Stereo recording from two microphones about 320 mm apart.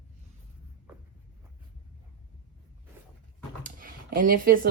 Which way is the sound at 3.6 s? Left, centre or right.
Right.